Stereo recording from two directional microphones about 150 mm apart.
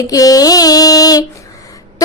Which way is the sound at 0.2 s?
25° left (ahead or behind).